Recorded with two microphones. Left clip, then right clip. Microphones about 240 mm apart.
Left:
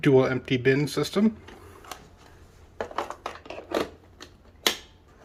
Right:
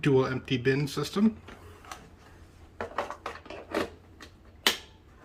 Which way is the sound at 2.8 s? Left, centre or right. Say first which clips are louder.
Left 2 dB; left.